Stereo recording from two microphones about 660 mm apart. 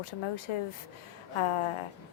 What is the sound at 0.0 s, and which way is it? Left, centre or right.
A woman's voice, left.